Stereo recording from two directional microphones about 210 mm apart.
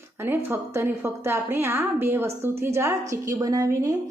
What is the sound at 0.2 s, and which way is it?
A woman's voice, 10° right (ahead or behind).